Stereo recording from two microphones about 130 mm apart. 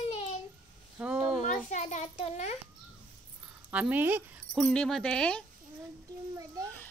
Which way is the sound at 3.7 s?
10° right (ahead or behind).